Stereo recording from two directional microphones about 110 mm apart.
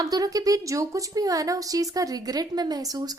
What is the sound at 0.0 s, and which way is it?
A woman's voice, 35° right (ahead or behind).